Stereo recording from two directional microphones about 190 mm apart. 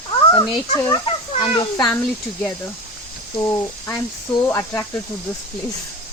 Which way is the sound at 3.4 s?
10° left (ahead or behind).